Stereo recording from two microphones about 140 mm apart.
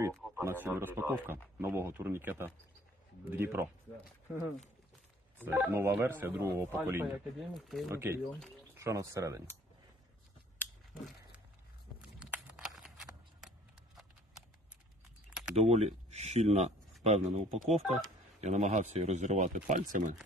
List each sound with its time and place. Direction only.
0.4 s speech: 15° right (ahead or behind)
5.4 s speech: 15° right (ahead or behind)
7.3 s speech: centre (ahead or behind)
7.9 s speech: 20° right (ahead or behind)
12.2 s a sound: 5° right (ahead or behind)
15.5 s speech: 50° right (ahead or behind)